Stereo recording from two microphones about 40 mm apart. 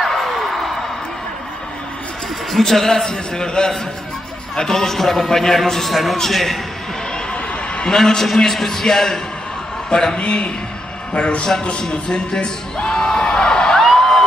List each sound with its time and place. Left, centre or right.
0.0 s a sound: centre
2.5 s a man's voice: centre
3.1 s a man's voice: centre
7.9 s a man's voice: centre
10.1 s a man's voice: left
11.9 s a sound: left